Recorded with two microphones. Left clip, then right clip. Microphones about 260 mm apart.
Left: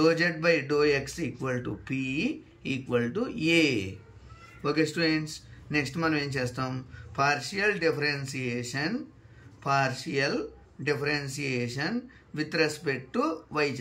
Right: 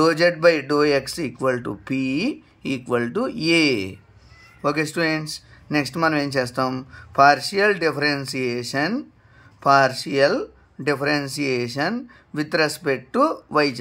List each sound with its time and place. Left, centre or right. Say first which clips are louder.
0.0 s speech: right 8 dB; centre